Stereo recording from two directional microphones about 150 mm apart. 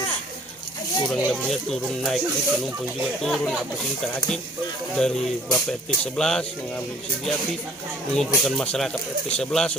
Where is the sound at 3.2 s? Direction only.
Centre (ahead or behind).